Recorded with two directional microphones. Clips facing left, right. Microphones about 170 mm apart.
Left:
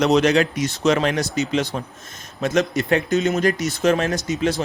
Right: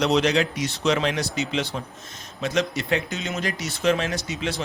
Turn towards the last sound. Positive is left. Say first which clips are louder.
# left 6 dB
turn(degrees=45)  # may be behind; listen again after turning